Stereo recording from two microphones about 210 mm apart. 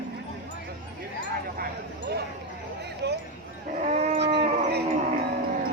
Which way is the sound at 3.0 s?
55° right (ahead or behind).